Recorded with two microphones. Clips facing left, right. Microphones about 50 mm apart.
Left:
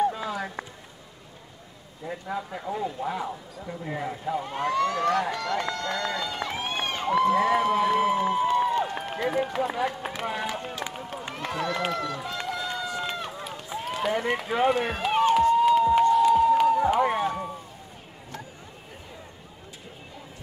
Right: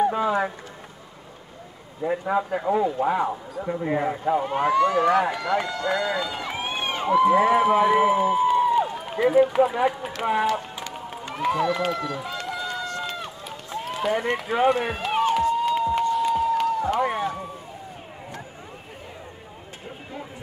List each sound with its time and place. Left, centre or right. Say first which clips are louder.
0.1 s a sound: right 9 dB; right
2.0 s a man's voice: right 9 dB; right
4.5 s speech: right 4 dB; centre
8.5 s run: right 4 dB; centre
9.0 s a man's voice: right 8 dB; centre
10.9 s run: right 1 dB; centre
11.3 s speech: right 7 dB; centre
12.4 s run: even; centre
15.5 s a sound: left 3 dB; centre